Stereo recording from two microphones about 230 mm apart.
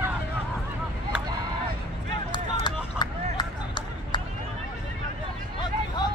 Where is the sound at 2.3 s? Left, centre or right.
Centre.